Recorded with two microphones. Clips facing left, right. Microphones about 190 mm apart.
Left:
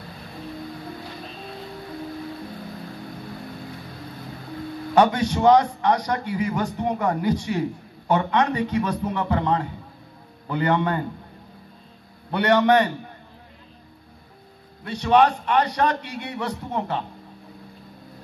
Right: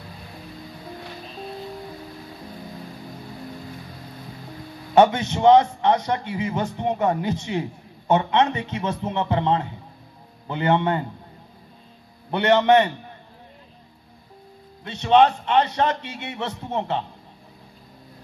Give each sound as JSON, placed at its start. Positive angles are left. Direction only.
{"t": 4.9, "sound": "a man's voice", "side_deg": -25}
{"t": 12.3, "sound": "a man's voice", "side_deg": -25}
{"t": 14.9, "sound": "a man's voice", "side_deg": -25}